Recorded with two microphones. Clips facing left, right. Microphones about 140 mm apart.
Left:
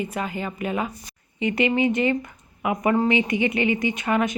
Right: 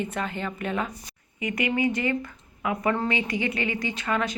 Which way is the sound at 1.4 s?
30° left (ahead or behind).